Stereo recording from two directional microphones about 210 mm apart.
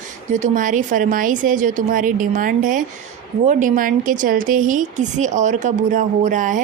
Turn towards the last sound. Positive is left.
turn(degrees=-35)  # may be behind; listen again after turning